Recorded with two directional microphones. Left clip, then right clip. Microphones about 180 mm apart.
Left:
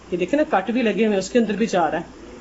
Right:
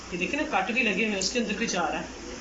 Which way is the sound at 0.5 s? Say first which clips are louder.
Left 5 dB; 55° left (ahead or behind).